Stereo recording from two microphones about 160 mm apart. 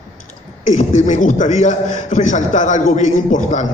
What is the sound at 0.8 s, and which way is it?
A man's voice, 50° left (ahead or behind).